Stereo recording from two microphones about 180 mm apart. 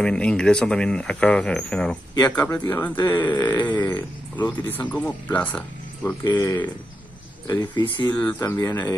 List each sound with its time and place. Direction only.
0.0 s speech: 5° left (ahead or behind)
6.2 s speech: 20° left (ahead or behind)
8.1 s speech: 10° left (ahead or behind)